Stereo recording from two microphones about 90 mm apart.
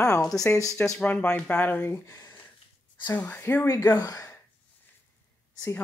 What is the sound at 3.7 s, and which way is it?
Speech, 45° left (ahead or behind).